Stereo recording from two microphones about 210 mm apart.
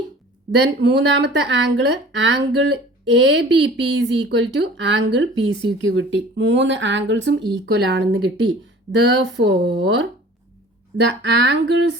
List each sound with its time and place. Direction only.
0.5 s speech: 55° right (ahead or behind)
11.2 s speech: 55° right (ahead or behind)